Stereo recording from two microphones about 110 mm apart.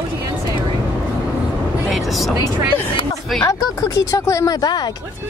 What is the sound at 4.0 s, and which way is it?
Speech, 30° left (ahead or behind).